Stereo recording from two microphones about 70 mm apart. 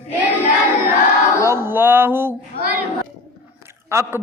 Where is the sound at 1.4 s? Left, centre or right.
Right.